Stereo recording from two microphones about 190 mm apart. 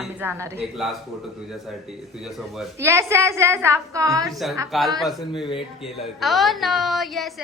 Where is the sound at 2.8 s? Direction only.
15° right (ahead or behind).